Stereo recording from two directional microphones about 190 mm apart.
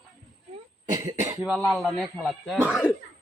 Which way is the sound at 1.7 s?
Centre (ahead or behind).